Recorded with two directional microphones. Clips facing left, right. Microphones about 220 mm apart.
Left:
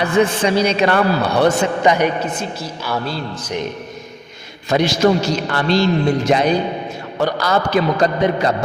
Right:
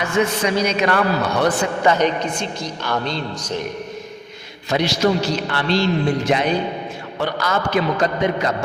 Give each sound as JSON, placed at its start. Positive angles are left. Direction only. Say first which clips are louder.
{"t": 0.0, "sound": "a man's voice", "louder": "left 4 dB", "side_deg": 35}
{"t": 4.7, "sound": "a man's voice", "louder": "left 3 dB", "side_deg": 50}